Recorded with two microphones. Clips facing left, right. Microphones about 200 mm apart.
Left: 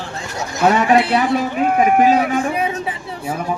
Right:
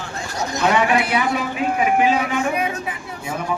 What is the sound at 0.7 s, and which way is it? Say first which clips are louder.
A man's voice: left 4 dB; 35° left (ahead or behind).